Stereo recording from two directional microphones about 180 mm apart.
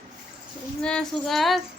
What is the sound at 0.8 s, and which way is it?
Speech, 5° left (ahead or behind).